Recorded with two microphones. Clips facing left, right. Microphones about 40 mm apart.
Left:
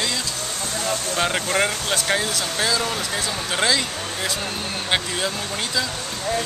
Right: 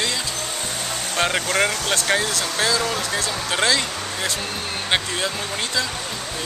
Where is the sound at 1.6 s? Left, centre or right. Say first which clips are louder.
Right 1 dB; centre.